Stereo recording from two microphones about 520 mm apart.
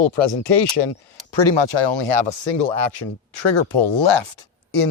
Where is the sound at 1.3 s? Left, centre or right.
Left.